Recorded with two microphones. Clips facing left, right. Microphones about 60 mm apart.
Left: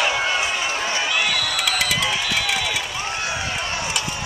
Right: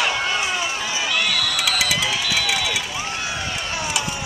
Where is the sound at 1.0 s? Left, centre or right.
Centre.